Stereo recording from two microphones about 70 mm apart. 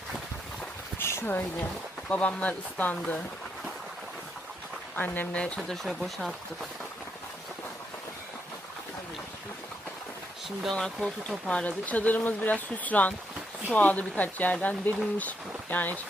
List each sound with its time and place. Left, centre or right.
0.9 s a sound: left
2.0 s speech: centre
4.9 s speech: left
5.5 s speech: centre
10.8 s speech: centre